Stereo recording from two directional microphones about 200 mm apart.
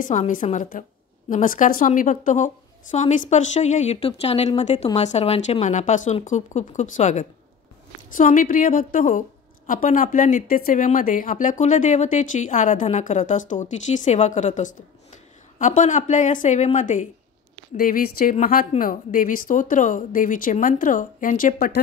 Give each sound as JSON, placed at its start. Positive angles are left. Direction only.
{"t": 0.0, "sound": "a woman's voice", "side_deg": 40}